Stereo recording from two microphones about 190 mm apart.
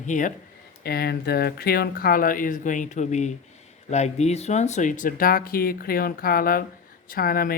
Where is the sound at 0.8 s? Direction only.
55° left (ahead or behind).